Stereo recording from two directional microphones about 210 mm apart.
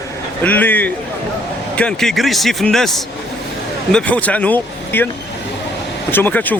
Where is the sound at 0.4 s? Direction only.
10° left (ahead or behind).